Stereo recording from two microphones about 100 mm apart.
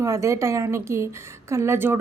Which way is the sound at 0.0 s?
30° right (ahead or behind).